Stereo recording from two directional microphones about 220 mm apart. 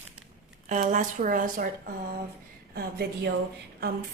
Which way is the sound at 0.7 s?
35° right (ahead or behind).